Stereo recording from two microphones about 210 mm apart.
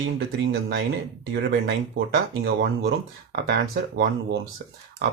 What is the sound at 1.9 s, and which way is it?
Speech, 50° right (ahead or behind).